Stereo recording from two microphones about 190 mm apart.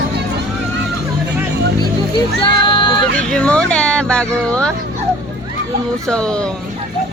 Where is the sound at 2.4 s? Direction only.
25° left (ahead or behind).